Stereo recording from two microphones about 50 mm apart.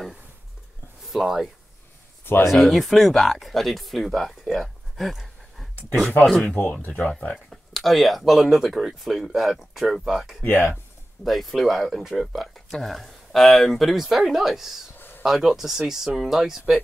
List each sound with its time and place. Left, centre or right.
1.1 s speech: centre
2.5 s speech: centre
6.5 s speech: left
7.0 s speech: left
7.7 s speech: centre
10.4 s speech: left
11.2 s speech: centre
15.0 s a sound: left
15.2 s speech: centre